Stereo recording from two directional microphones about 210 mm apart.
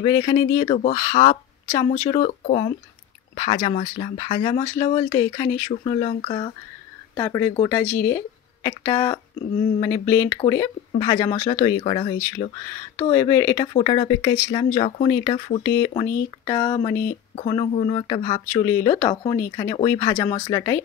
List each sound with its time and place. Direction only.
0.0 s speech: 20° left (ahead or behind)
2.1 s speech: 35° left (ahead or behind)
7.2 s speech: 15° left (ahead or behind)
13.1 s speech: 15° left (ahead or behind)
13.7 s speech: 25° left (ahead or behind)
14.8 s speech: 35° left (ahead or behind)
15.0 s speech: 20° left (ahead or behind)
15.6 s speech: 15° left (ahead or behind)
17.4 s speech: 30° left (ahead or behind); by 20.2 s 15° left (ahead or behind)
20.2 s speech: 30° left (ahead or behind)
20.5 s speech: 15° left (ahead or behind)